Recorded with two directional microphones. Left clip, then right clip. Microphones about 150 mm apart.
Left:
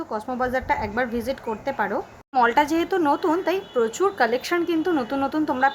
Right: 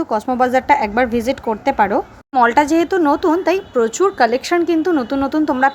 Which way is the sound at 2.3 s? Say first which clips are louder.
Right 6 dB; 30° right (ahead or behind).